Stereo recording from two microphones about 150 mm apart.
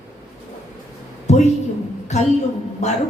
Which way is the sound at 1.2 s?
50° left (ahead or behind).